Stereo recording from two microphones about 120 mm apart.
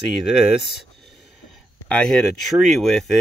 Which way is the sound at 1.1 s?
5° left (ahead or behind).